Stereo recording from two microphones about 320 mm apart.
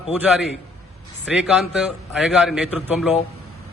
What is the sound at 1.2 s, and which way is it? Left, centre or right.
A man's voice, centre.